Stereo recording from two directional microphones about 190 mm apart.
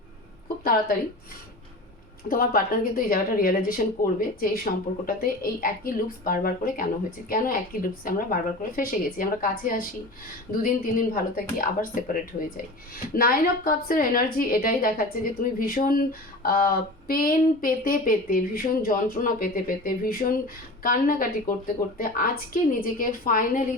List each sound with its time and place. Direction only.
0.4 s a sound: 50° left (ahead or behind)
2.3 s speech: 50° left (ahead or behind)
13.1 s speech: 50° left (ahead or behind)